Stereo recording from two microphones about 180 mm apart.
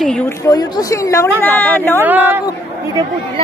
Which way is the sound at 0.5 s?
20° left (ahead or behind).